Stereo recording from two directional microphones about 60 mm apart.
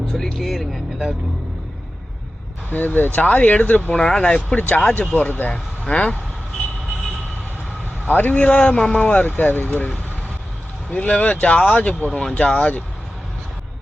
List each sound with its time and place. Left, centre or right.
0.1 s speech: centre
2.6 s speech: left
5.5 s speech: centre
8.0 s speech: left